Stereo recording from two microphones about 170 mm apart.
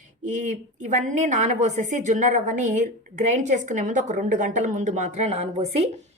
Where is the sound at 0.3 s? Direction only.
45° right (ahead or behind).